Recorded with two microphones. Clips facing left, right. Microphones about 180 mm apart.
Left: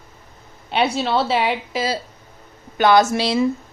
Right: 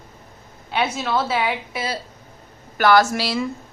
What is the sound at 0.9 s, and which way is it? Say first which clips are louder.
A woman's voice: left 3 dB; 30° left (ahead or behind).